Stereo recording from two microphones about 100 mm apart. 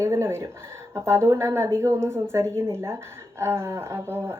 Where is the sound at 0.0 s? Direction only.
25° right (ahead or behind).